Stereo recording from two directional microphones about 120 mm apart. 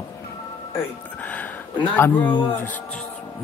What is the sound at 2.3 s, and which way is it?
Speech, 40° left (ahead or behind).